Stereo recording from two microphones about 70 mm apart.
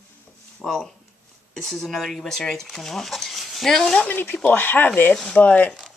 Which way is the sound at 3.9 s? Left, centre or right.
Left.